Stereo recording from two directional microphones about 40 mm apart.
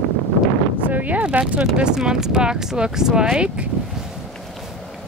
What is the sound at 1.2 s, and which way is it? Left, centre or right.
Speech, right.